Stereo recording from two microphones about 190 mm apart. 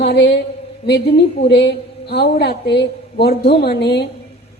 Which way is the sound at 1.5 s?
60° left (ahead or behind).